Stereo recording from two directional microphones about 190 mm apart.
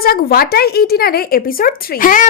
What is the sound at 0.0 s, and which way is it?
A woman's voice, 55° left (ahead or behind).